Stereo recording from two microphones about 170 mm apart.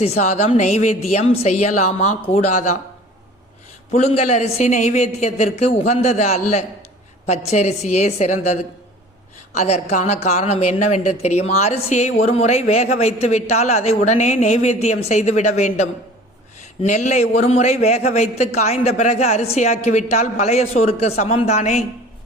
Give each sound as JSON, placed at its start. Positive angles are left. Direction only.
{"t": 0.0, "sound": "a man's voice", "side_deg": 40}
{"t": 3.9, "sound": "a man's voice", "side_deg": 40}
{"t": 9.6, "sound": "a man's voice", "side_deg": 40}